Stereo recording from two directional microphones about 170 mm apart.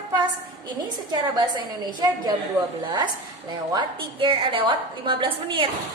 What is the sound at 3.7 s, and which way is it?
A woman's voice, 30° right (ahead or behind).